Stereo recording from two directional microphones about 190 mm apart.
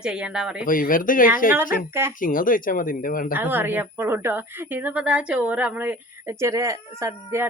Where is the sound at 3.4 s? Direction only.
10° right (ahead or behind).